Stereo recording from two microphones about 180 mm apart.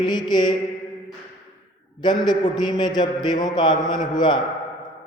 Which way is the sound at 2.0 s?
25° left (ahead or behind).